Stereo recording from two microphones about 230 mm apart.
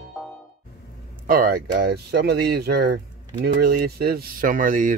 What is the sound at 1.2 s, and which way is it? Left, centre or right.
Speech, right.